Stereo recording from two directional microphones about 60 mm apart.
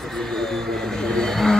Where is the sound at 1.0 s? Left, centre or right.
Centre.